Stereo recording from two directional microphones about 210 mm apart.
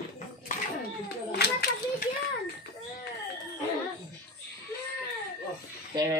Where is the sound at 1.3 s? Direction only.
50° left (ahead or behind).